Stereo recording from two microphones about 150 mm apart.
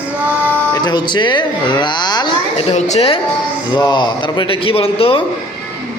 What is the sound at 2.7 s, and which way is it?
Speech, 50° left (ahead or behind).